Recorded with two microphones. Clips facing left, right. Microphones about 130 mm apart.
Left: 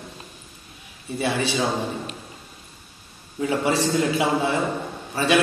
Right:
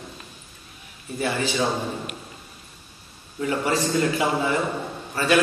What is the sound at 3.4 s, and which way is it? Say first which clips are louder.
A man's voice: left 2 dB; 15° left (ahead or behind).